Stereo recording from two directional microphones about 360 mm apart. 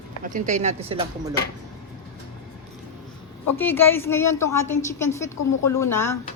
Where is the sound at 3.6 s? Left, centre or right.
Centre.